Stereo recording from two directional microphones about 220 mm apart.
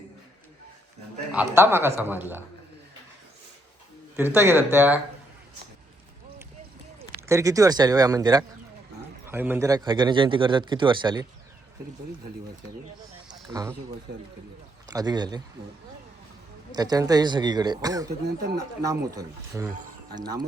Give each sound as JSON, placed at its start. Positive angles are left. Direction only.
{"t": 1.3, "sound": "a man's voice", "side_deg": -5}
{"t": 4.4, "sound": "a man's voice", "side_deg": -10}
{"t": 7.2, "sound": "a man's voice", "side_deg": -15}
{"t": 13.5, "sound": "a man's voice", "side_deg": -15}
{"t": 14.8, "sound": "a man's voice", "side_deg": -15}
{"t": 16.7, "sound": "a man's voice", "side_deg": -15}